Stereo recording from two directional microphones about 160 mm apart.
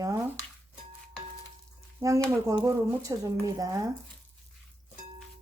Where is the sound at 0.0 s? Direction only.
20° right (ahead or behind).